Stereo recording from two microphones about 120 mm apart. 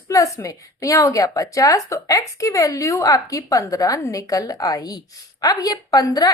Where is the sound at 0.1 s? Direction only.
25° left (ahead or behind).